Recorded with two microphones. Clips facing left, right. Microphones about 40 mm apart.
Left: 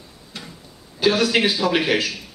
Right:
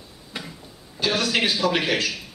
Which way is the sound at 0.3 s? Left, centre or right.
Centre.